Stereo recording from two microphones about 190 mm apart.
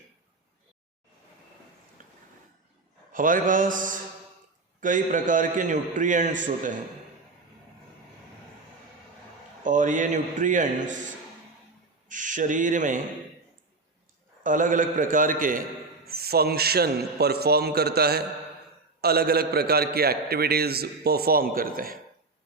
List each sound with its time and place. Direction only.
2.0 s a sound: 45° right (ahead or behind)
3.1 s a man's voice: 45° right (ahead or behind)
9.6 s a man's voice: 40° right (ahead or behind)
12.0 s speech: 40° right (ahead or behind)
14.4 s a man's voice: 45° right (ahead or behind)